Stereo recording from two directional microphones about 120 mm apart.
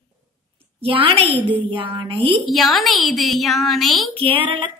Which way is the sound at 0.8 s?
45° right (ahead or behind).